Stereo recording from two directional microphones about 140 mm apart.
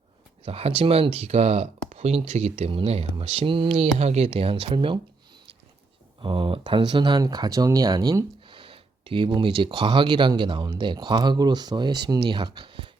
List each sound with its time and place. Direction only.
0.4 s speech: 45° right (ahead or behind)
6.1 s speech: 35° right (ahead or behind)